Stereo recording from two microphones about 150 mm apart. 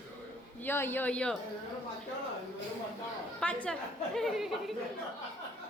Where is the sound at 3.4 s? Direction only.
10° left (ahead or behind).